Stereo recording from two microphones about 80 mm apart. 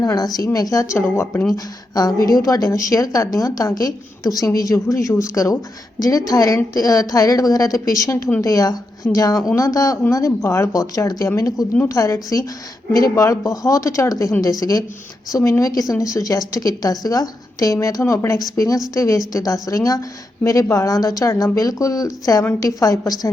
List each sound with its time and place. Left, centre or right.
0.0 s a woman's voice: left
1.0 s speech: left
1.5 s a woman's voice: left